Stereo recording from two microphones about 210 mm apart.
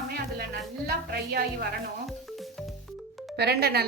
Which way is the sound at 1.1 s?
50° right (ahead or behind).